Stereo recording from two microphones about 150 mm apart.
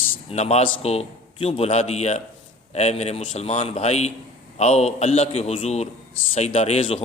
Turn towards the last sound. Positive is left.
turn(degrees=40)  # may be behind; listen again after turning